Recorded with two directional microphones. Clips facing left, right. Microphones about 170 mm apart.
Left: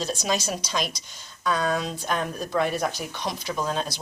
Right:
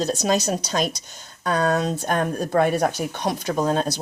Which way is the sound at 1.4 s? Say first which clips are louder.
Right 4 dB; 55° right (ahead or behind).